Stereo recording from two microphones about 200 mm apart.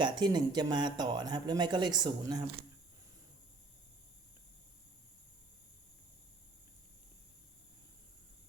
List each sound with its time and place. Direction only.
0.0 s speech: 20° right (ahead or behind)